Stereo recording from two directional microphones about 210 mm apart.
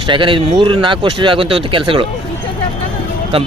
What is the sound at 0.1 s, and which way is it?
Speech, 25° right (ahead or behind).